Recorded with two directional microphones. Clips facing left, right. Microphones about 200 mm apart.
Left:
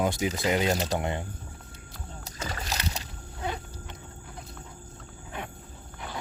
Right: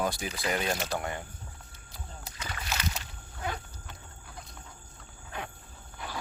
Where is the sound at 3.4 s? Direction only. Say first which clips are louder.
Left 2 dB; 20° left (ahead or behind).